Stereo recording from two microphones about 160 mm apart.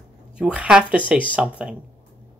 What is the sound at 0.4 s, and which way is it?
Speech, 5° right (ahead or behind).